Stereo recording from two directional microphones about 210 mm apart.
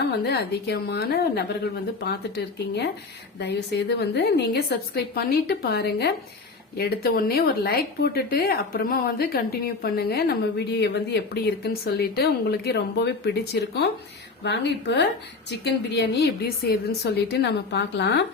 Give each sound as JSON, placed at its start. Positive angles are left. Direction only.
{"t": 0.3, "sound": "a woman's voice", "side_deg": 50}